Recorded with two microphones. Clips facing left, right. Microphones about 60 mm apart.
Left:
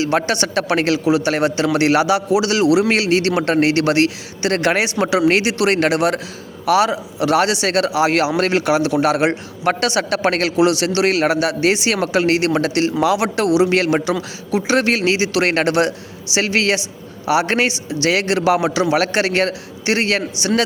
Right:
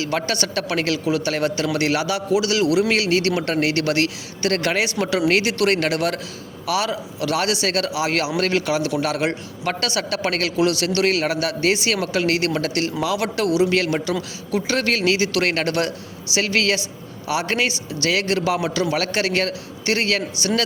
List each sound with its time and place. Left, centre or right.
0.0 s a man's voice: left
13.7 s a man's voice: left
14.1 s a man's voice: left